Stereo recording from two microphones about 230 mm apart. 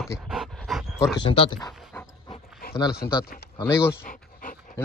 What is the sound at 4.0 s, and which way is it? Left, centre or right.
Dog, left.